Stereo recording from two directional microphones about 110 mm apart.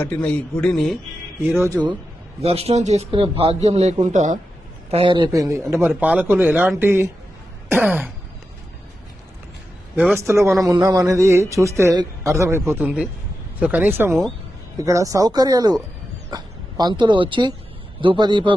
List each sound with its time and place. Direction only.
0.0 s speech: 10° left (ahead or behind)
1.4 s speech: 20° right (ahead or behind)
2.4 s a man's voice: 65° right (ahead or behind); by 3.1 s 85° right
3.1 s a man's voice: 55° right (ahead or behind); by 3.9 s 85° right
4.9 s a man's voice: 55° right (ahead or behind)
5.3 s speech: 30° right (ahead or behind); by 8.1 s 10° right (ahead or behind)
10.2 s a man's voice: 25° right (ahead or behind); by 18.5 s 45° right (ahead or behind)